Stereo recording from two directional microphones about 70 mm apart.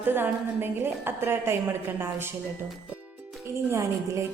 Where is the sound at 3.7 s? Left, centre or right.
Right.